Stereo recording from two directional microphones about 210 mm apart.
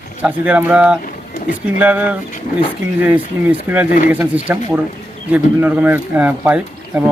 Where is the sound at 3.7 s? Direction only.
10° right (ahead or behind).